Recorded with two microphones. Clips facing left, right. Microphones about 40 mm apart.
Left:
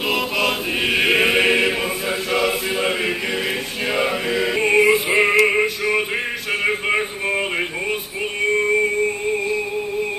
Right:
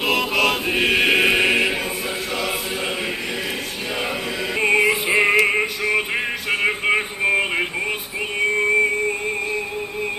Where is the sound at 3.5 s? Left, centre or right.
Left.